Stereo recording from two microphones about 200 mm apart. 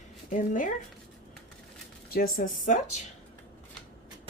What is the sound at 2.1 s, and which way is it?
Speech, 45° left (ahead or behind).